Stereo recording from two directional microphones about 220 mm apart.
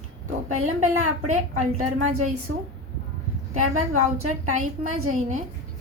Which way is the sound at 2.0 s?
75° right (ahead or behind).